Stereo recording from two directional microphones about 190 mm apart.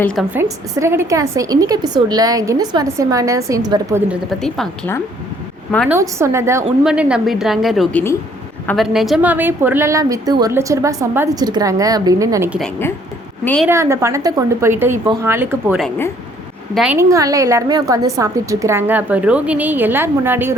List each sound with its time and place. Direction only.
0.0 s a woman's voice: 5° left (ahead or behind)
0.3 s a woman's voice: 15° right (ahead or behind)
4.1 s a woman's voice: centre (ahead or behind)
5.9 s a woman's voice: 15° right (ahead or behind)
12.5 s a woman's voice: centre (ahead or behind)
13.7 s a woman's voice: 15° right (ahead or behind)